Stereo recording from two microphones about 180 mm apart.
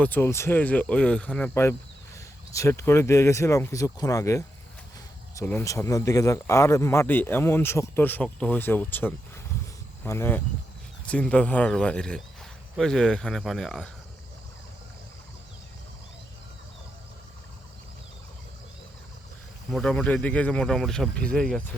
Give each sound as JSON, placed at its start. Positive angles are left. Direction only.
{"t": 0.0, "sound": "speech", "side_deg": 10}
{"t": 19.7, "sound": "speech", "side_deg": 5}